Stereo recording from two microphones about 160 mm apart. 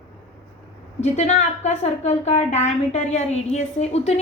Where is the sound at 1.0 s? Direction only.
45° left (ahead or behind).